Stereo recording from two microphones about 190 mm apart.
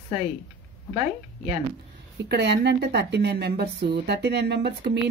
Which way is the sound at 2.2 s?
60° right (ahead or behind).